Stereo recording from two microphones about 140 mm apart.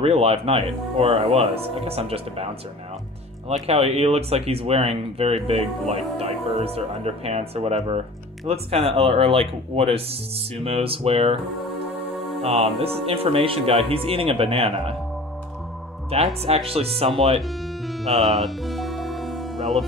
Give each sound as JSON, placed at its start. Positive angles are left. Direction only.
{"t": 0.0, "sound": "speech", "side_deg": -45}
{"t": 12.4, "sound": "speech", "side_deg": -50}
{"t": 16.1, "sound": "speech", "side_deg": -45}
{"t": 18.2, "sound": "music", "side_deg": 0}